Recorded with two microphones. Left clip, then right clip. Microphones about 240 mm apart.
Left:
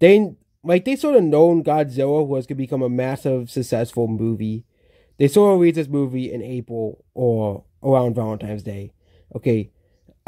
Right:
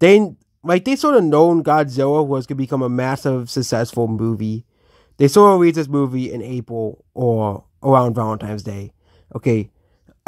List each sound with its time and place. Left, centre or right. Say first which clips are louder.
0.0 s speech: right 1 dB; centre
6.8 s speech: right 1 dB; right
7.2 s speech: right 2 dB; centre